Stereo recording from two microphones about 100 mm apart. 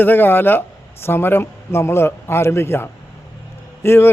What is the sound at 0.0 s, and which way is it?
Speech, 20° left (ahead or behind).